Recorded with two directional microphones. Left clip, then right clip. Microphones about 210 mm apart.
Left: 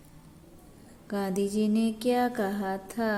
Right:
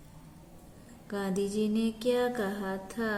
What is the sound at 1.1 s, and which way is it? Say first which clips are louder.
A woman's voice: left 3 dB; 35° left (ahead or behind).